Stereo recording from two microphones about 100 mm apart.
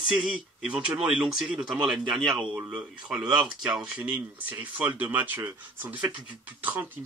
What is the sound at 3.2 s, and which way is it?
Speech, 45° right (ahead or behind).